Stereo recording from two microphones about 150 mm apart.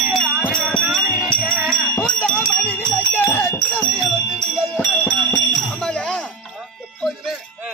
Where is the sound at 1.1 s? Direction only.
10° right (ahead or behind).